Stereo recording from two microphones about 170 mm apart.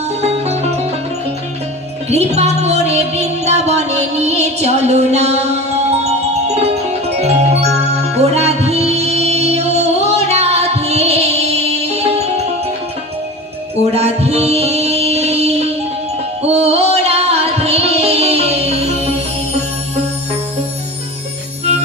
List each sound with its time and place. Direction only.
0.2 s music: 40° right (ahead or behind)
2.0 s music: 40° right (ahead or behind)
8.2 s music: 40° right (ahead or behind)
13.9 s music: 40° right (ahead or behind)